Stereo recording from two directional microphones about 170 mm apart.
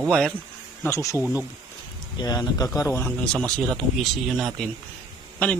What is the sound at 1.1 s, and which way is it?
Speech, 10° right (ahead or behind).